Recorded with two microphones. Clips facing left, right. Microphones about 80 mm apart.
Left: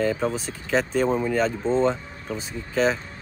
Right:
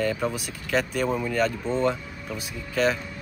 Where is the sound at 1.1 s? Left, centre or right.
Left.